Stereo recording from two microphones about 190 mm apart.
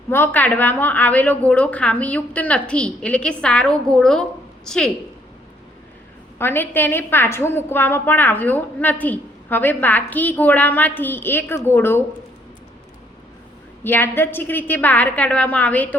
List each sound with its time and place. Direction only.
0.1 s a woman's voice: 10° left (ahead or behind)
6.4 s a woman's voice: 10° left (ahead or behind)
13.8 s a woman's voice: 10° left (ahead or behind)